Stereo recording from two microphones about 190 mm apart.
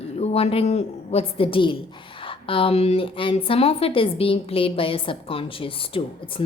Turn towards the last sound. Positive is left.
turn(degrees=30)  # may be behind; listen again after turning